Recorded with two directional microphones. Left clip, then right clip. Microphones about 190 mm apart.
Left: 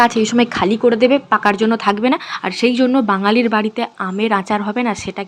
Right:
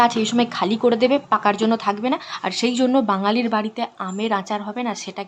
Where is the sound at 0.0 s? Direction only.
15° left (ahead or behind).